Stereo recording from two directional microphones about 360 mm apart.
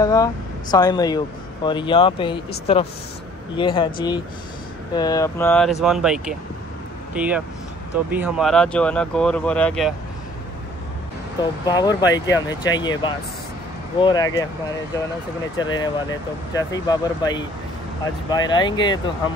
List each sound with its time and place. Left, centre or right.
0.0 s speech: centre
11.6 s speech: centre
15.6 s speech: centre